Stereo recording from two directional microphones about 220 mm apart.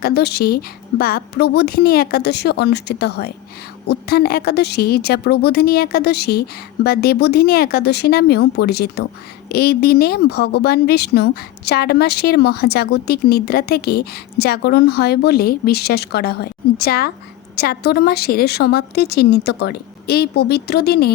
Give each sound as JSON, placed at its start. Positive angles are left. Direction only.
{"t": 0.0, "sound": "speech", "side_deg": 45}